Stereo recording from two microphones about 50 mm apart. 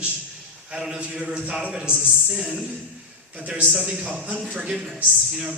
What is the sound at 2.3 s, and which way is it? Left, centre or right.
Speech, centre.